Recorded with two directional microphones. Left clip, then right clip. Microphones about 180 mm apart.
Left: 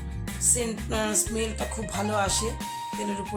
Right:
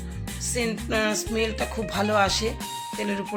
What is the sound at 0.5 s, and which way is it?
Music, 10° right (ahead or behind).